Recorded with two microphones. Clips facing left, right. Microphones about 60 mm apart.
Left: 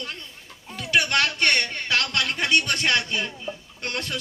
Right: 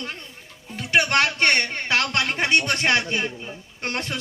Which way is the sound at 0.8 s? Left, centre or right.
Right.